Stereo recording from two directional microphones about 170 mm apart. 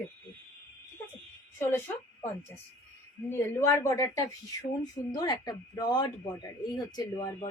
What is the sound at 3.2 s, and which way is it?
A woman's voice, 15° left (ahead or behind).